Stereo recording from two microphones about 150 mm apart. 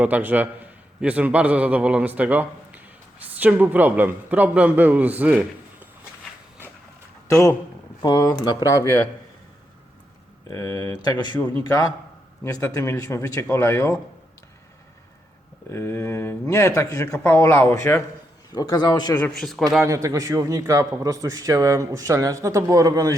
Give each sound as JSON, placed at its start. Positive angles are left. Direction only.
{"t": 0.0, "sound": "a man's voice", "side_deg": -10}
{"t": 7.3, "sound": "speech", "side_deg": 20}
{"t": 10.5, "sound": "speech", "side_deg": 25}
{"t": 15.7, "sound": "speech", "side_deg": 20}
{"t": 19.3, "sound": "a man's voice", "side_deg": 0}
{"t": 19.8, "sound": "a man's voice", "side_deg": -20}